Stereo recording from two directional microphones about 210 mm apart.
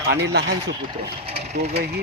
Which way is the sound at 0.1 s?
55° right (ahead or behind).